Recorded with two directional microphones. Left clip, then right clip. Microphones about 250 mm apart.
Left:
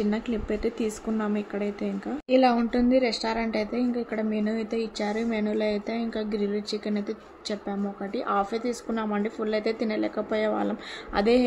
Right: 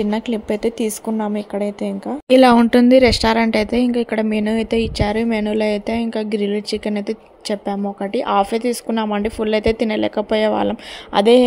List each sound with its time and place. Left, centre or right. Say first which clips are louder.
0.0 s speech: right 8 dB; right
2.2 s speech: right 11 dB; right